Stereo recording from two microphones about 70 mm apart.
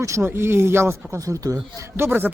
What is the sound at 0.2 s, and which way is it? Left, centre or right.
Speech, right.